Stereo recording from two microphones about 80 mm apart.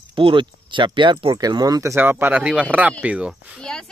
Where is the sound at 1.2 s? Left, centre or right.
Right.